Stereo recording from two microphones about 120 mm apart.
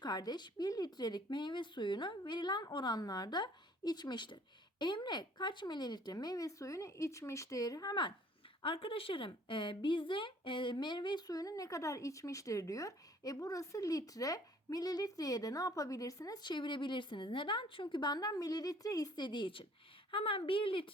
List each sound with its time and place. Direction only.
0.0 s speech: 35° left (ahead or behind)
8.6 s speech: 45° left (ahead or behind)